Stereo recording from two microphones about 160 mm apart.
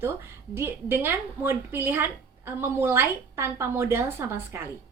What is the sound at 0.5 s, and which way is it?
A woman's voice, 15° right (ahead or behind).